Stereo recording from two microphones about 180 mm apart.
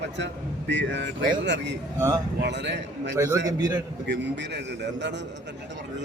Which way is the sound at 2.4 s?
75° right (ahead or behind).